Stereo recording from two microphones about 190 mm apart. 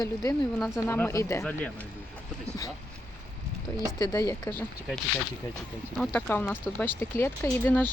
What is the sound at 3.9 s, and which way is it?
Speech, 20° left (ahead or behind).